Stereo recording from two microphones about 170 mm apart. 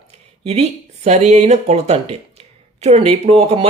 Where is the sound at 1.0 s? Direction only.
40° right (ahead or behind).